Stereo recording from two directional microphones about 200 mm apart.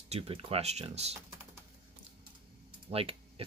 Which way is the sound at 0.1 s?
30° right (ahead or behind).